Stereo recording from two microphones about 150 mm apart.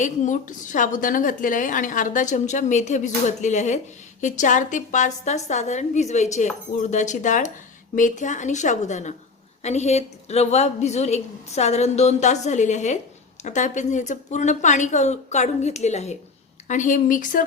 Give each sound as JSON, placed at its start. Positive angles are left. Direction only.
{"t": 0.0, "sound": "a woman's voice", "side_deg": 60}